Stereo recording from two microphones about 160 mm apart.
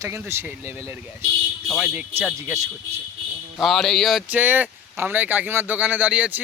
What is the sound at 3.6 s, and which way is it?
Speech, centre (ahead or behind).